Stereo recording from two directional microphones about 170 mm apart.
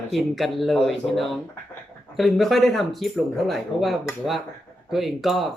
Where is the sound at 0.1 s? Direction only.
Centre (ahead or behind).